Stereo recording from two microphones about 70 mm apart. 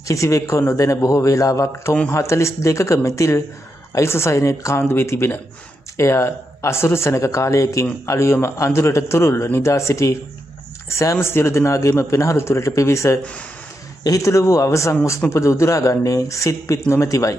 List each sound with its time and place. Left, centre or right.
0.1 s speech: left